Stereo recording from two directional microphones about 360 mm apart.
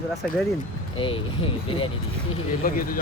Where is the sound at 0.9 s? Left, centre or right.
Centre.